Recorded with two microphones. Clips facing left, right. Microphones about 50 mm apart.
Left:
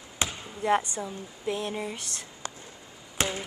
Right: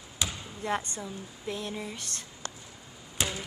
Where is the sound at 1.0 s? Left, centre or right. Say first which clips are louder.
Left 4 dB; left.